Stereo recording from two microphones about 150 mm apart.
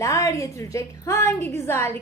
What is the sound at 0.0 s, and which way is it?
A woman's voice, 20° left (ahead or behind).